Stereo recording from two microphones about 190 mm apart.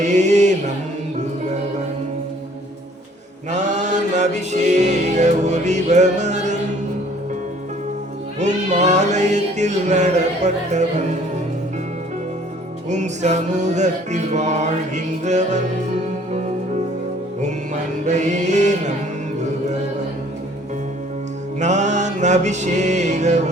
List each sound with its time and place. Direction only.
0.0 s music: 40° right (ahead or behind)
3.5 s music: 40° right (ahead or behind)
8.4 s music: 40° right (ahead or behind)
12.9 s music: 40° right (ahead or behind)
17.4 s music: 40° right (ahead or behind)
21.6 s music: 40° right (ahead or behind)